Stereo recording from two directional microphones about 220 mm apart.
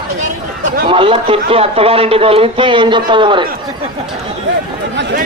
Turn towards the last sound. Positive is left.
turn(degrees=-20)  # may be behind; listen again after turning